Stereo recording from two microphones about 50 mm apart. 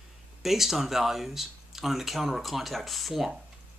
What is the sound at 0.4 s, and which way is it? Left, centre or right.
Speech, centre.